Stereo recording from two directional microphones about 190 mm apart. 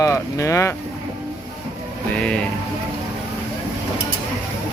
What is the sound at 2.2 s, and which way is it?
Music, 5° left (ahead or behind).